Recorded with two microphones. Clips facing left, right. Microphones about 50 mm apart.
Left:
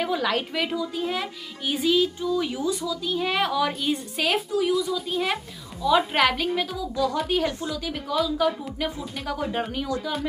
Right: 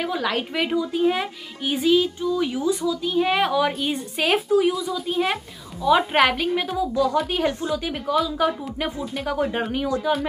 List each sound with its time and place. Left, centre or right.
0.0 s speech: centre
0.6 s speech: centre
6.8 s speech: right
7.2 s speech: centre
7.4 s speech: right